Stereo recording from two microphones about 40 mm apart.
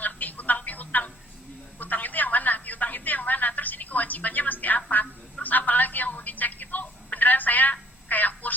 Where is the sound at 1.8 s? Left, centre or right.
Left.